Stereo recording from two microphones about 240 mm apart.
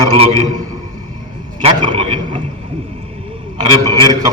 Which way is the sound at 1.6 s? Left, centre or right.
Centre.